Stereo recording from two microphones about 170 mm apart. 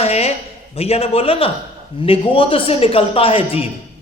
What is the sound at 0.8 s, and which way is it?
A man's voice, 35° left (ahead or behind).